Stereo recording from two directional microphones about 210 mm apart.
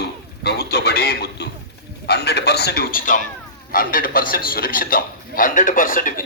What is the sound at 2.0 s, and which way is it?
A man's voice, 50° left (ahead or behind).